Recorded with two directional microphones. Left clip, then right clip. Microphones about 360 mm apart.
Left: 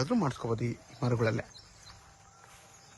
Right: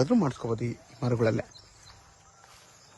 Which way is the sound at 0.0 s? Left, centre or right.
Centre.